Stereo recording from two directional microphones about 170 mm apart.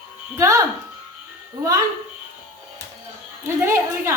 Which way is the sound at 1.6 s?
20° right (ahead or behind).